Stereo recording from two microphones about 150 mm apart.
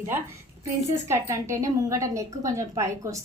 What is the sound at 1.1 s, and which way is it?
Speech, 20° right (ahead or behind).